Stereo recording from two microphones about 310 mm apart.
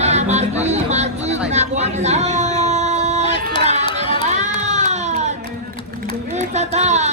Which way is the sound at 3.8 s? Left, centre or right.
Centre.